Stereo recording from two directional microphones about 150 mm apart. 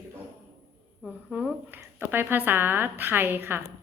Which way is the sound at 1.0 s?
5° right (ahead or behind).